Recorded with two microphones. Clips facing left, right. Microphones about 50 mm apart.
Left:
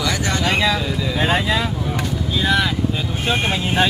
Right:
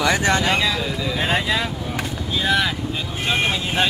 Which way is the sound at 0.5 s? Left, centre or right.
Centre.